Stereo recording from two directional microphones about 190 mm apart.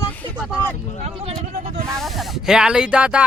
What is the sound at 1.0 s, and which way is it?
Speech, 35° right (ahead or behind).